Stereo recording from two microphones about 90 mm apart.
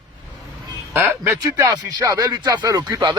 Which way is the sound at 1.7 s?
50° right (ahead or behind).